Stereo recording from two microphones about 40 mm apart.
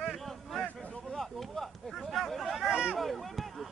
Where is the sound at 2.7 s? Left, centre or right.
Right.